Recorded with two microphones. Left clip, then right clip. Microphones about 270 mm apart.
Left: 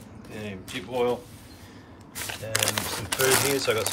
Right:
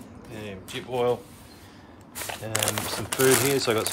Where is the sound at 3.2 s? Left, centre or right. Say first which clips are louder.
Right 2 dB; centre.